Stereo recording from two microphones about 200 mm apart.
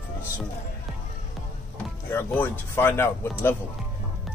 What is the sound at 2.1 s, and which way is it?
Speech, 10° left (ahead or behind).